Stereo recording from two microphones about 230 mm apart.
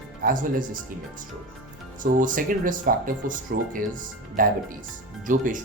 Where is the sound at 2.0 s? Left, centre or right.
Right.